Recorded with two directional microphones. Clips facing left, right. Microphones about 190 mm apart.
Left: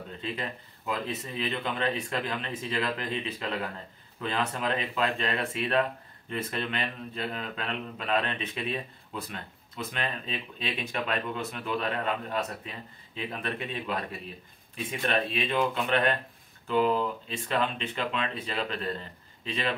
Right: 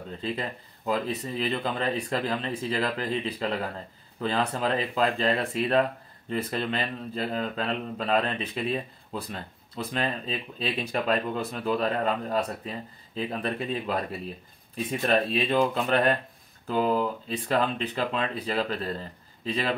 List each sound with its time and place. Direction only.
0.2 s speech: 35° right (ahead or behind)